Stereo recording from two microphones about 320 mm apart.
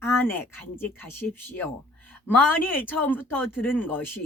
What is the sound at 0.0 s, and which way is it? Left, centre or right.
Speech, centre.